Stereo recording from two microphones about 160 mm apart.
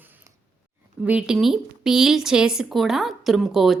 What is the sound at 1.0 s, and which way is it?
Speech, 5° right (ahead or behind).